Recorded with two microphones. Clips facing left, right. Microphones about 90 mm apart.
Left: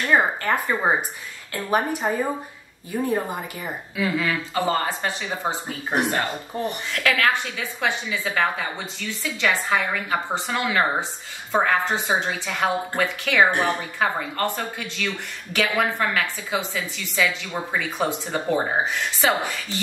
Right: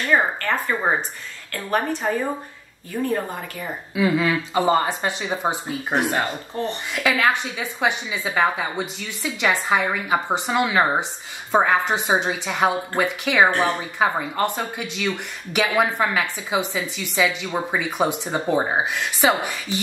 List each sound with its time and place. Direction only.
0.1 s speech: 15° left (ahead or behind)
3.9 s a woman's voice: 15° right (ahead or behind)
6.5 s speech: 10° left (ahead or behind)
6.9 s a woman's voice: 15° right (ahead or behind)